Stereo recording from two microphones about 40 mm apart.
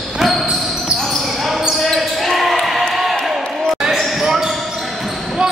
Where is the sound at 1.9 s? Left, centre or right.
Centre.